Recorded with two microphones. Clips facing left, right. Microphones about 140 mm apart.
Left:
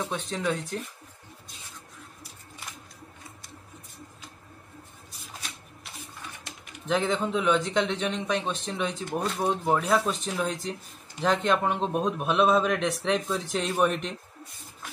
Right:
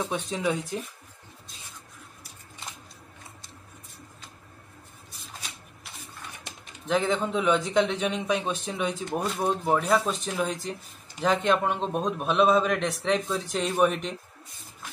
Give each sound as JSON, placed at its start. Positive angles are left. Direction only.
{"t": 0.0, "sound": "speech", "side_deg": -10}
{"t": 6.9, "sound": "speech", "side_deg": 0}